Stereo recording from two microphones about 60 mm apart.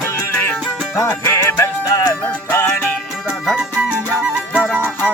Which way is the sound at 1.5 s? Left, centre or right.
Left.